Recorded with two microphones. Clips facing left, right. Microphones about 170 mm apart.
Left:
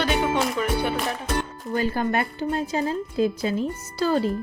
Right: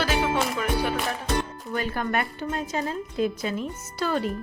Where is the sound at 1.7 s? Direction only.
30° left (ahead or behind).